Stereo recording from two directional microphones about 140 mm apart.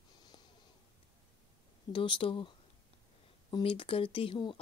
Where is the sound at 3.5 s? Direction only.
40° left (ahead or behind).